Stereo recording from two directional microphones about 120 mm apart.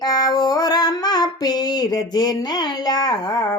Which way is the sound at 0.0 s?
35° left (ahead or behind).